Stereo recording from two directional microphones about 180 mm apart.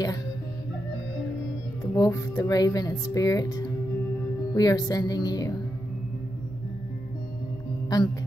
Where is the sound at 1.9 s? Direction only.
20° left (ahead or behind).